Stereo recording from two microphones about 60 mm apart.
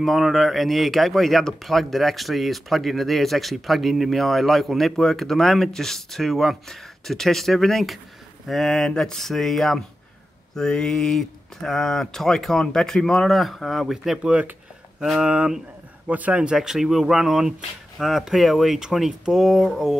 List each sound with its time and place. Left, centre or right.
0.0 s speech: centre
14.2 s a man's voice: centre
16.5 s speech: centre